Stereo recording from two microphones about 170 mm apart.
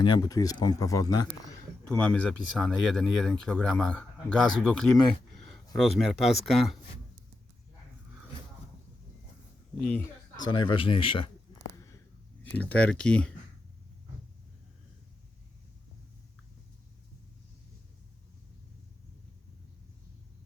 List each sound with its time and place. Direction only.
0.0 s speech: 25° left (ahead or behind)
1.9 s speech: 10° left (ahead or behind)
10.4 s speech: 30° left (ahead or behind)
12.4 s speech: 10° left (ahead or behind)